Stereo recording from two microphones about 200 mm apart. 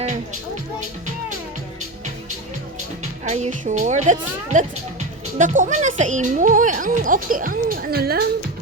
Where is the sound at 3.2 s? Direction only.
35° right (ahead or behind).